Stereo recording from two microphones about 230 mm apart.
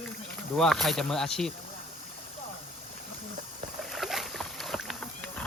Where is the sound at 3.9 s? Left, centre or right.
Centre.